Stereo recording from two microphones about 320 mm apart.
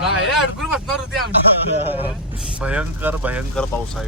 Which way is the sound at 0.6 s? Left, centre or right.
Centre.